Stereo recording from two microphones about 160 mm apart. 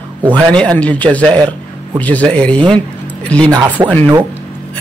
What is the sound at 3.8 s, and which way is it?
Speech, 25° right (ahead or behind).